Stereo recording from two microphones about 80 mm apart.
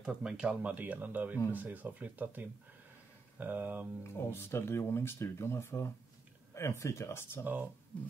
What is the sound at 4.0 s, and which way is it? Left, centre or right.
Speech, left.